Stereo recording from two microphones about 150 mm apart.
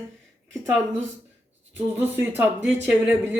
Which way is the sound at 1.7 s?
15° right (ahead or behind).